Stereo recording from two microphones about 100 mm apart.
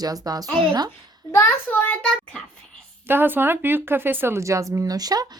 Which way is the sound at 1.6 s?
15° left (ahead or behind).